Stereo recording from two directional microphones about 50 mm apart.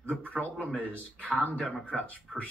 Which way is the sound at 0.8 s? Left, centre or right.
Left.